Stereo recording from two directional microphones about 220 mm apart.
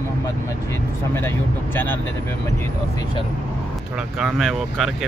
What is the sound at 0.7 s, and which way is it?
Speech, 10° left (ahead or behind).